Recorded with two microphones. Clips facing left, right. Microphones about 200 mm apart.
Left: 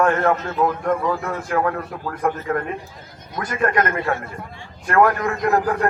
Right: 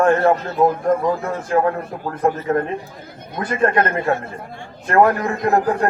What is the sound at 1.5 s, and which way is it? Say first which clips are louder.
A man's voice: right 4 dB; 25° right (ahead or behind).